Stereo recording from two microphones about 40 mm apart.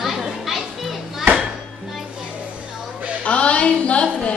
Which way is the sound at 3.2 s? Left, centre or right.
Left.